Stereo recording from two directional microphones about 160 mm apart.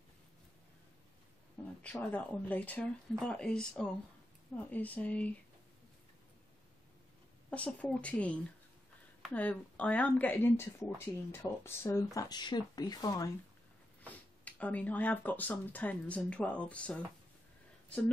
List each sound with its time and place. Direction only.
1.8 s speech: 10° left (ahead or behind)
7.5 s speech: 10° left (ahead or behind); by 13.3 s 25° left (ahead or behind)
14.0 s speech: 10° left (ahead or behind)